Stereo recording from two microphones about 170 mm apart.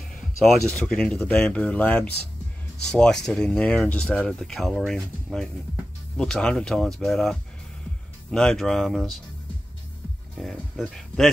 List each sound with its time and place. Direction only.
0.1 s a sound: 5° left (ahead or behind)
0.7 s speech: 5° left (ahead or behind)
10.3 s speech: centre (ahead or behind)